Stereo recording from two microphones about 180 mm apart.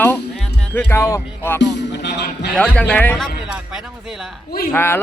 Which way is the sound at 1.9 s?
70° left (ahead or behind).